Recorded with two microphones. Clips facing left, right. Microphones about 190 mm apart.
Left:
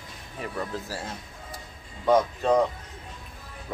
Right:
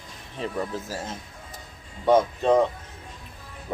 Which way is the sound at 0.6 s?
15° right (ahead or behind).